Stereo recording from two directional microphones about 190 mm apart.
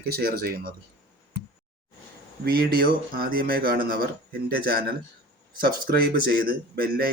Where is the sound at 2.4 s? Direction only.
50° right (ahead or behind).